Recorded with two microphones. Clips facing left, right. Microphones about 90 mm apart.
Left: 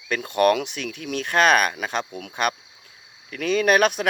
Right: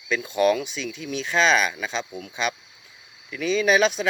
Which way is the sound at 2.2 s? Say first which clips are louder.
Left 3 dB; 70° left (ahead or behind).